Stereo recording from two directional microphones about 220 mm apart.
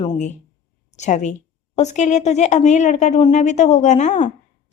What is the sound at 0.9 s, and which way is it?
A woman's voice, 30° left (ahead or behind).